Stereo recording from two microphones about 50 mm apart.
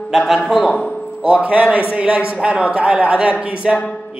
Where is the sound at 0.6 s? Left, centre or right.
Left.